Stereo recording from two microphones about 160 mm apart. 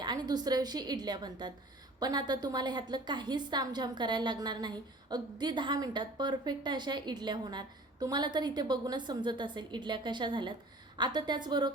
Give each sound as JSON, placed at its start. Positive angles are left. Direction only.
{"t": 0.0, "sound": "a woman's voice", "side_deg": -25}